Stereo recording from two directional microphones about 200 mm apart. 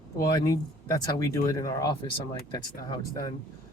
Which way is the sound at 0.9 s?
15° left (ahead or behind).